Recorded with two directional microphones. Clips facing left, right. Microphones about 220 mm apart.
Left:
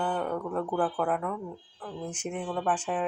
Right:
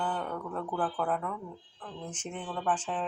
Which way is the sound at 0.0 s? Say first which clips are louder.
Left 4 dB; 10° left (ahead or behind).